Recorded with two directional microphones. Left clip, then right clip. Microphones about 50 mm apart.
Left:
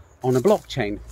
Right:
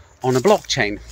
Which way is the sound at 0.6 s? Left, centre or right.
Left.